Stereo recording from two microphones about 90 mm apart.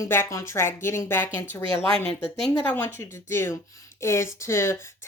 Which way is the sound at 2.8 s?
30° left (ahead or behind).